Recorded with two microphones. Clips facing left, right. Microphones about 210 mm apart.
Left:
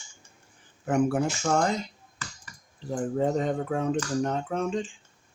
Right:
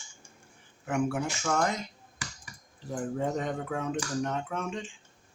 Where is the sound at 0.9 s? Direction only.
40° left (ahead or behind).